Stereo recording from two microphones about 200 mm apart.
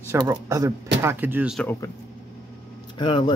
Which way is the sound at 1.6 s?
10° left (ahead or behind).